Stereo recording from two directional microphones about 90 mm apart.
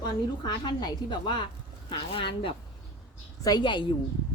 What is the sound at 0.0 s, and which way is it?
A woman's voice, 50° left (ahead or behind).